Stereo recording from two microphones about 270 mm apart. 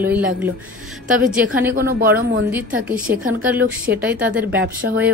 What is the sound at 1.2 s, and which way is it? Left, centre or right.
Speech, centre.